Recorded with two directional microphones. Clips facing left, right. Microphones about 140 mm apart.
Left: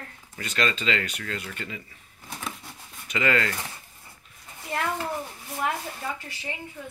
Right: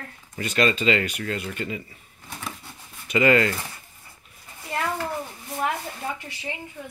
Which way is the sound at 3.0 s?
15° right (ahead or behind).